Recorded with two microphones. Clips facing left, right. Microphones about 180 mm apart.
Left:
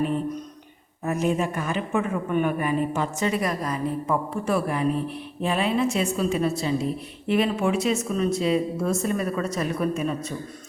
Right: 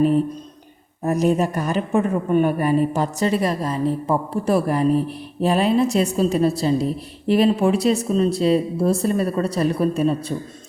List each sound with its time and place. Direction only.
0.0 s a woman's voice: 35° right (ahead or behind)